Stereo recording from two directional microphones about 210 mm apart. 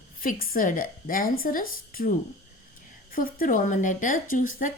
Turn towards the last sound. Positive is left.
turn(degrees=40)  # may be behind; listen again after turning